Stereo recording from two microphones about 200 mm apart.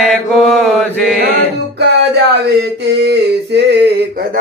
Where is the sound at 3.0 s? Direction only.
55° right (ahead or behind).